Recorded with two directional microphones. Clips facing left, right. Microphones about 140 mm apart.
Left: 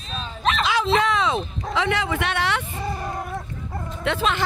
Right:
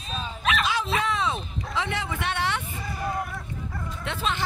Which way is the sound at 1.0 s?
90° left.